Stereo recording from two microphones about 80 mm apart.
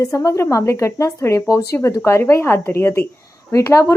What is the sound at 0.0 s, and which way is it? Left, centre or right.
A woman's voice, left.